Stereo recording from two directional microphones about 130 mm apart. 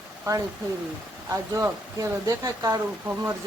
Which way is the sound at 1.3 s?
25° right (ahead or behind).